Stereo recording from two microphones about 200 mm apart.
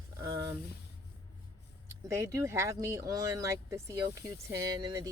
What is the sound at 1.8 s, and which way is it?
Speech, 15° right (ahead or behind).